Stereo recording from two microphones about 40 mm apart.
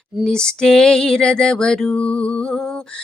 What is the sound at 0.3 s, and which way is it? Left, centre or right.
Lullaby, centre.